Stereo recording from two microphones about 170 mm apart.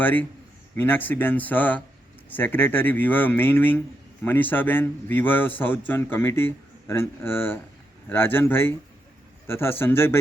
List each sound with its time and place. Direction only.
0.0 s a man's voice: 10° left (ahead or behind)